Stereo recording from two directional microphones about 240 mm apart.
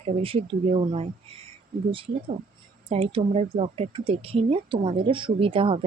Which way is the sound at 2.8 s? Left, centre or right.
Right.